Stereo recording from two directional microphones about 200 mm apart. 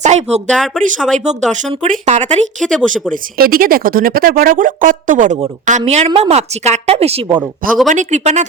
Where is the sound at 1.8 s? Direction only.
35° right (ahead or behind).